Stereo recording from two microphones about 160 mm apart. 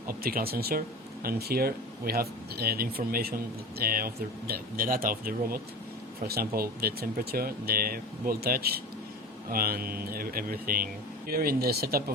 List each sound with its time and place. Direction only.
0.1 s speech: 65° right (ahead or behind)